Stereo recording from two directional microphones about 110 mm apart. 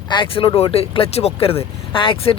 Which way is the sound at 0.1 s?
50° left (ahead or behind).